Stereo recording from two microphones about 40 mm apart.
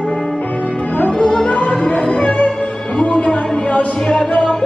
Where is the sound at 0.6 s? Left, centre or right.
Left.